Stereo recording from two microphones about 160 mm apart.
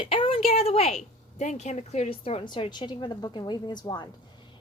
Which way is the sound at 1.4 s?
45° left (ahead or behind).